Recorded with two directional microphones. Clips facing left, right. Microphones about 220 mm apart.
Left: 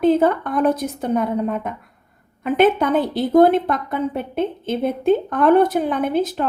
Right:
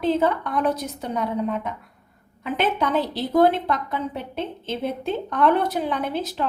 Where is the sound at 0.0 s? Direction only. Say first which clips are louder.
Left 5 dB; 50° left (ahead or behind).